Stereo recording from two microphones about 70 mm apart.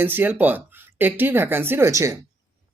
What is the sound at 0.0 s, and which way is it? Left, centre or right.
Speech, right.